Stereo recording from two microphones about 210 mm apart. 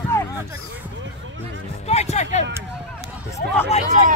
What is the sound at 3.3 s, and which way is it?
Speech, 10° left (ahead or behind).